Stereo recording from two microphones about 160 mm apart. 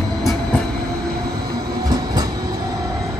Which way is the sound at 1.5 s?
25° right (ahead or behind).